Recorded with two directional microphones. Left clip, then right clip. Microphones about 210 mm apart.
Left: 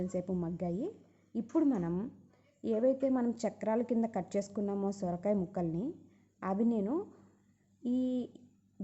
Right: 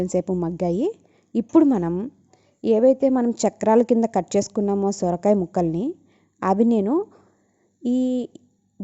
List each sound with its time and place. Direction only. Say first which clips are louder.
0.0 s a woman's voice: right 14 dB; 40° right (ahead or behind)